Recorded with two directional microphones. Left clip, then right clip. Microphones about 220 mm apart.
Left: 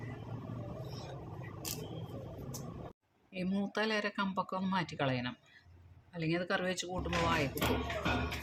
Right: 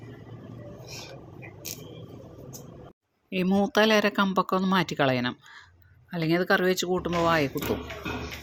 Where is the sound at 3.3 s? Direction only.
35° right (ahead or behind).